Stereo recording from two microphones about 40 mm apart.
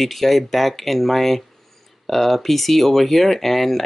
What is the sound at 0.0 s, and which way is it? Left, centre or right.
Speech, centre.